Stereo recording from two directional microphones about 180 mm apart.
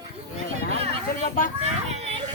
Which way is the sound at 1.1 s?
50° left (ahead or behind).